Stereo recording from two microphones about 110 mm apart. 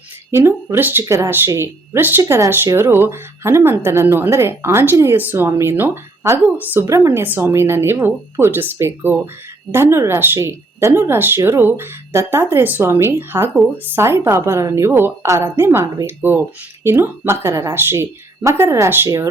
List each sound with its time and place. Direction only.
0.3 s a woman's voice: 20° right (ahead or behind)